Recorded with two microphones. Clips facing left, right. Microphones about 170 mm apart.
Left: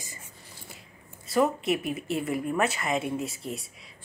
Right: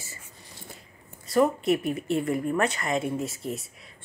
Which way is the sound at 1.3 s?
Centre (ahead or behind).